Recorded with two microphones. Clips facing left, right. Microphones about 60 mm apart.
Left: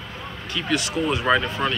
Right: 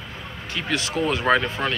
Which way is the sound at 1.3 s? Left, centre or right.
Right.